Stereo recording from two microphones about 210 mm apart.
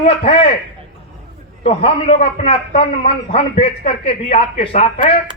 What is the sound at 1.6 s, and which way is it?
A man's voice, 25° left (ahead or behind).